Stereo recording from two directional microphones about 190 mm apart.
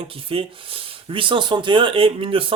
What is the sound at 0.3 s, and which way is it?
Speech, 30° right (ahead or behind).